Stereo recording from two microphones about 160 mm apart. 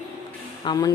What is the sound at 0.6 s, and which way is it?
Speech, 25° left (ahead or behind).